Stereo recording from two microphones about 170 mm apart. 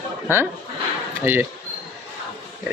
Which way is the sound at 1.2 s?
15° right (ahead or behind).